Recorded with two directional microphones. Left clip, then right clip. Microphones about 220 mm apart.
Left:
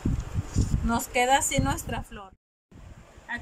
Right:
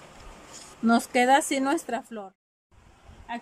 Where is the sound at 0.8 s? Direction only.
20° right (ahead or behind).